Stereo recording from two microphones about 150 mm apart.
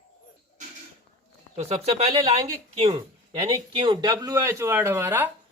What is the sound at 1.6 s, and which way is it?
Speech, 45° right (ahead or behind).